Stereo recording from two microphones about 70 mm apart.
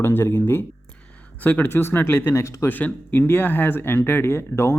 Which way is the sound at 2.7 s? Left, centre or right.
Left.